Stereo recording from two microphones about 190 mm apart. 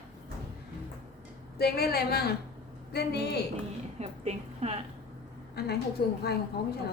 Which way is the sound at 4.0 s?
35° right (ahead or behind).